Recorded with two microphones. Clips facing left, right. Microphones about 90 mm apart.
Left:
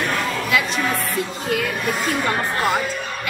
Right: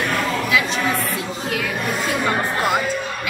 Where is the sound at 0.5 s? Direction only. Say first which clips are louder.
Even; centre (ahead or behind).